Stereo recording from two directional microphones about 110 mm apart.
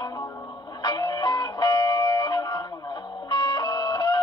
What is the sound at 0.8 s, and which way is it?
Music, 40° left (ahead or behind).